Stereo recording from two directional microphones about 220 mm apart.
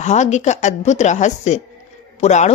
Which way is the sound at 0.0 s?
30° left (ahead or behind).